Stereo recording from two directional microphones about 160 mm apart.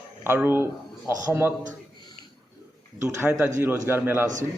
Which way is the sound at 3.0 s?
15° right (ahead or behind).